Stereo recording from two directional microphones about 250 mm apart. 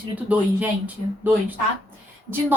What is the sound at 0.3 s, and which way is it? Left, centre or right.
A woman's voice, centre.